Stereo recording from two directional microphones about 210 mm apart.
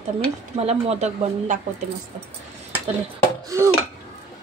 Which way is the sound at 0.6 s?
30° right (ahead or behind).